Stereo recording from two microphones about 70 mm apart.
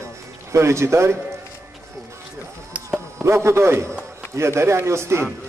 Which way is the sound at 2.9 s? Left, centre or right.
Right.